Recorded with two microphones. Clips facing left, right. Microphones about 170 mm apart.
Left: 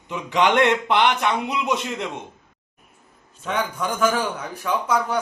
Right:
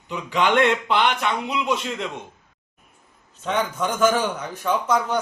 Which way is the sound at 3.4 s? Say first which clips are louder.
Right 2 dB; 10° left (ahead or behind).